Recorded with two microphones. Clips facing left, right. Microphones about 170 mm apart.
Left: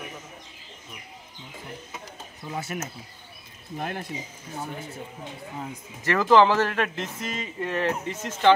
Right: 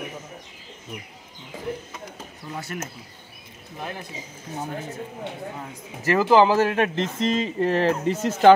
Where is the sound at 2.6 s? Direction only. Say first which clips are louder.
Right 1 dB; 20° left (ahead or behind).